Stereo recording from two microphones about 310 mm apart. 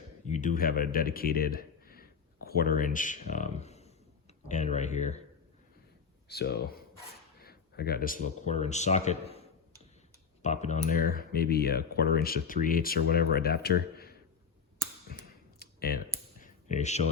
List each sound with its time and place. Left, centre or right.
0.3 s a man's voice: left
6.2 s speech: left
15.5 s computer keyboard: left